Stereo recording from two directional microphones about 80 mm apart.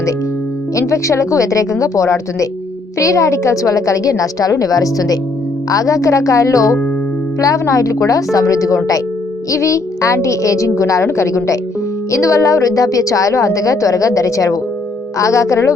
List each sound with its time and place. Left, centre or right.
0.8 s a woman's voice: left